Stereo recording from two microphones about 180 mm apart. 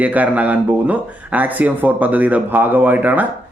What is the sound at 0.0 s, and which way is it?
Speech, 10° right (ahead or behind).